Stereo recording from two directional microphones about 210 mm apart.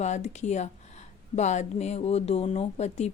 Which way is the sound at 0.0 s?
35° left (ahead or behind).